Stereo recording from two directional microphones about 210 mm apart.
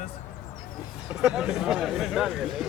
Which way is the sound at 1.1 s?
5° right (ahead or behind).